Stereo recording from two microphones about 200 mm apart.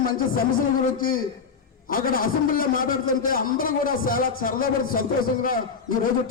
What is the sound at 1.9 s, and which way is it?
A man's voice, 45° left (ahead or behind).